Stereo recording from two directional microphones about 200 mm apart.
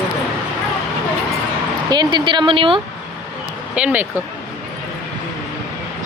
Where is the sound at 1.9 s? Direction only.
20° right (ahead or behind).